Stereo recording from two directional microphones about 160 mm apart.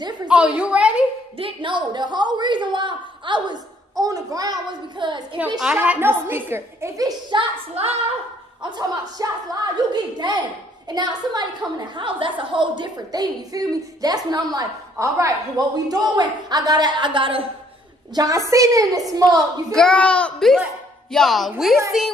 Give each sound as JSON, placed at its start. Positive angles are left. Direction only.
{"t": 0.3, "sound": "a woman's voice", "side_deg": -5}
{"t": 1.4, "sound": "a woman's voice", "side_deg": -30}
{"t": 5.6, "sound": "a woman's voice", "side_deg": -5}
{"t": 7.7, "sound": "a woman's voice", "side_deg": -40}
{"t": 8.6, "sound": "a woman's voice", "side_deg": -25}
{"t": 18.1, "sound": "a woman's voice", "side_deg": -25}
{"t": 19.7, "sound": "a child's voice", "side_deg": 5}